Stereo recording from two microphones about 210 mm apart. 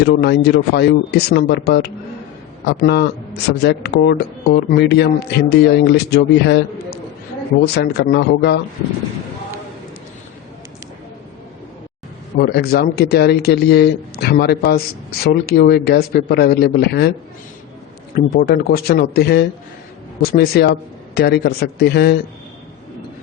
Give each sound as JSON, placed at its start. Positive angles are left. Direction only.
{"t": 0.0, "sound": "speech", "side_deg": 50}
{"t": 12.4, "sound": "speech", "side_deg": 50}
{"t": 18.1, "sound": "speech", "side_deg": 45}